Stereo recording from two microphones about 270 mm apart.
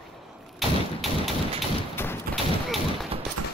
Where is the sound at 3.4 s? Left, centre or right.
Right.